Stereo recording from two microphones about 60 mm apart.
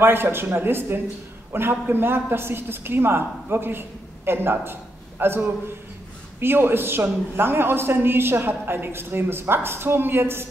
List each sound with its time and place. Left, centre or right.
0.0 s a man's voice: right